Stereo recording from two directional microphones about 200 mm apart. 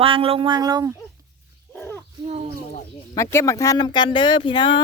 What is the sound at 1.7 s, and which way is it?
Owl, 10° left (ahead or behind).